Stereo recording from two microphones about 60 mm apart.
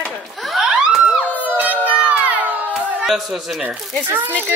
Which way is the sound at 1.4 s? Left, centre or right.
Right.